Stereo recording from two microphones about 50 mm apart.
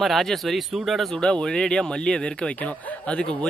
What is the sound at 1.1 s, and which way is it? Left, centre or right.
Speech, centre.